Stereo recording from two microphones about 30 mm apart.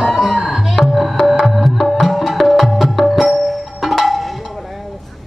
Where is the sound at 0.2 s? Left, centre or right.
Centre.